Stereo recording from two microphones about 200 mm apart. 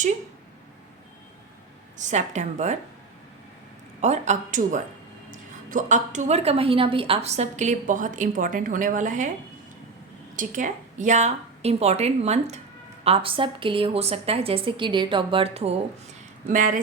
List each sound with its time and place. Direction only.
2.0 s a woman's voice: 35° right (ahead or behind)
4.0 s a woman's voice: 35° right (ahead or behind)
10.3 s a woman's voice: 40° right (ahead or behind)
16.5 s a woman's voice: 40° right (ahead or behind)